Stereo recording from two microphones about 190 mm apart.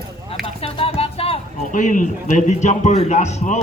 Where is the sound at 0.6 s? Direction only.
30° left (ahead or behind).